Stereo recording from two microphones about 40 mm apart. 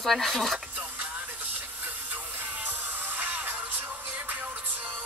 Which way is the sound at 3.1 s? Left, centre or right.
Right.